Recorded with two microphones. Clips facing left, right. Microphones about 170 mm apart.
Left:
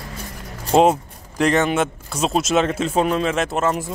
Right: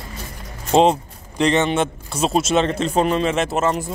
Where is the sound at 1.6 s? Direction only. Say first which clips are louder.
Even; centre (ahead or behind).